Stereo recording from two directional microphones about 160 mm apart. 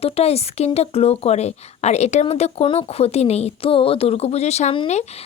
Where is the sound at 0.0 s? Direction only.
40° left (ahead or behind).